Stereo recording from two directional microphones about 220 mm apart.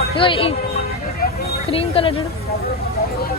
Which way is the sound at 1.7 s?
25° left (ahead or behind).